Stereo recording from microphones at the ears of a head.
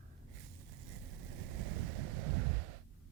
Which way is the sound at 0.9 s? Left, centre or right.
Right.